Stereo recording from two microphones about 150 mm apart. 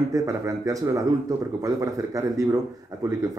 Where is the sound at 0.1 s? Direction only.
20° right (ahead or behind).